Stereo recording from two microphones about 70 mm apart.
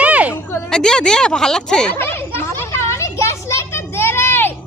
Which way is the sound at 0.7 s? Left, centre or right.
Centre.